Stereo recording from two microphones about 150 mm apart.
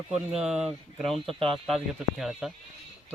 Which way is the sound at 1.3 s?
40° right (ahead or behind).